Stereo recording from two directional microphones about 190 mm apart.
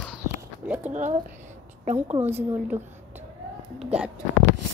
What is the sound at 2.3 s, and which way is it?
Speech, 10° right (ahead or behind).